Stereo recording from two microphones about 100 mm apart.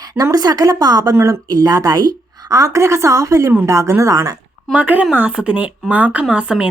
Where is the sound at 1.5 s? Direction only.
40° right (ahead or behind).